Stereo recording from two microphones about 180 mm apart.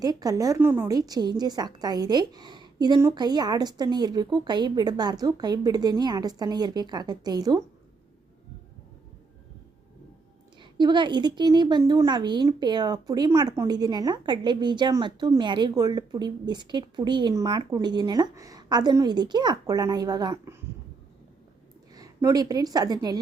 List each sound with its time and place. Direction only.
0.0 s a woman's voice: 20° right (ahead or behind)
10.6 s a woman's voice: 25° right (ahead or behind)
21.9 s a woman's voice: 20° right (ahead or behind)